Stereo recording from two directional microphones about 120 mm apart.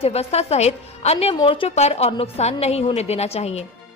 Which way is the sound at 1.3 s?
45° left (ahead or behind).